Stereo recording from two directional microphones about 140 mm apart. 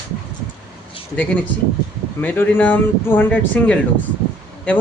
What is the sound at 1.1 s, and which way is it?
Speech, 10° left (ahead or behind).